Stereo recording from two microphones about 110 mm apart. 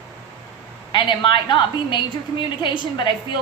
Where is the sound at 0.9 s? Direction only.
45° left (ahead or behind).